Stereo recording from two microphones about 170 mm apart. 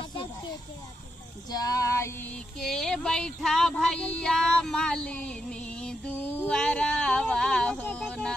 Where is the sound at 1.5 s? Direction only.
20° left (ahead or behind).